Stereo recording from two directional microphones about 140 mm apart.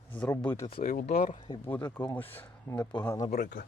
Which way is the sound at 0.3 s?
20° left (ahead or behind).